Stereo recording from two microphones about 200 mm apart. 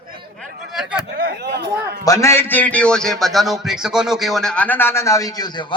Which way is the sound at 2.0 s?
15° left (ahead or behind).